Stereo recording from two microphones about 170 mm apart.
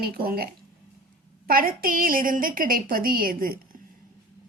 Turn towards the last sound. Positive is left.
turn(degrees=-55)  # may be behind; listen again after turning